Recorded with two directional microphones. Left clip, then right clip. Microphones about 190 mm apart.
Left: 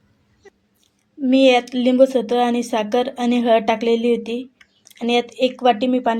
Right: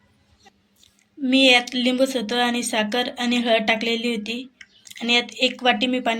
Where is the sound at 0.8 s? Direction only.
40° left (ahead or behind).